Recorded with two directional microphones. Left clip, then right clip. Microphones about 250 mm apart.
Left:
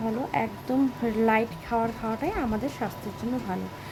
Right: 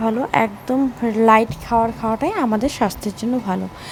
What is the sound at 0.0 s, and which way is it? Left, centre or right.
A woman's voice, centre.